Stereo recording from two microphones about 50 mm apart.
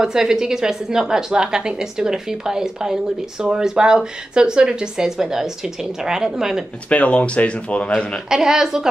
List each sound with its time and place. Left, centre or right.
0.0 s a woman's voice: centre
6.9 s speech: left
8.3 s a woman's voice: centre